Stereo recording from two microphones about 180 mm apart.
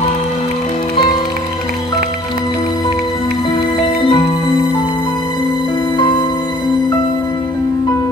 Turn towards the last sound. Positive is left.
turn(degrees=25)  # may be behind; listen again after turning